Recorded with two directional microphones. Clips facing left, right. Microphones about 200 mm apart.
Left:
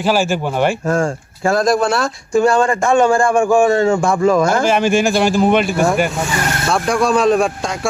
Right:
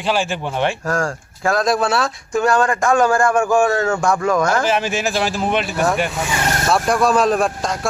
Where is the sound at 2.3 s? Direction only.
30° left (ahead or behind).